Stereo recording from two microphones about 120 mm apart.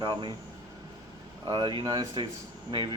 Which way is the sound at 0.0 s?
40° right (ahead or behind).